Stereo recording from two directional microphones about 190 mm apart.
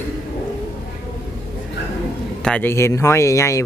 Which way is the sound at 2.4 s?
5° left (ahead or behind).